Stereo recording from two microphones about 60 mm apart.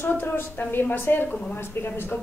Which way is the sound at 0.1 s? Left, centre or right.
Left.